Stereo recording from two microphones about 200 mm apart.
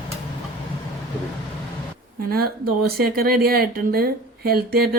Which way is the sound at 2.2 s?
50° right (ahead or behind).